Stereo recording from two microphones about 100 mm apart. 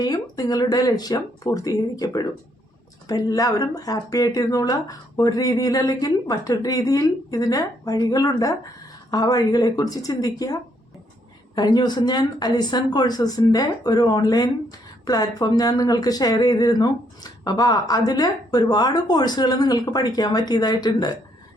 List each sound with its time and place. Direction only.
0.0 s speech: 40° left (ahead or behind)